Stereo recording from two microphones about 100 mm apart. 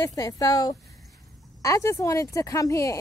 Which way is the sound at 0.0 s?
35° left (ahead or behind).